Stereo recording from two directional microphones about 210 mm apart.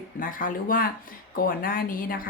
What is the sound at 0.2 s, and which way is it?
A woman's voice, 40° left (ahead or behind).